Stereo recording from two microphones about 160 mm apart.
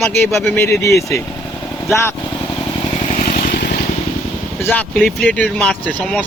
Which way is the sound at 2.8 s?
40° left (ahead or behind).